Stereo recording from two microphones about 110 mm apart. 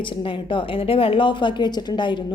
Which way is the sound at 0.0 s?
50° left (ahead or behind).